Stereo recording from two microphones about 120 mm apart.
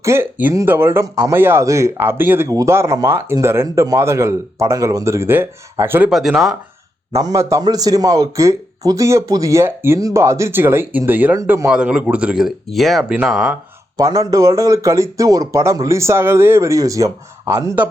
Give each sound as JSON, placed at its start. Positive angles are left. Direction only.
{"t": 0.0, "sound": "a man's voice", "side_deg": -20}
{"t": 6.1, "sound": "speech", "side_deg": -5}
{"t": 7.1, "sound": "a man's voice", "side_deg": -30}
{"t": 11.7, "sound": "speech", "side_deg": -10}
{"t": 13.9, "sound": "a man's voice", "side_deg": -30}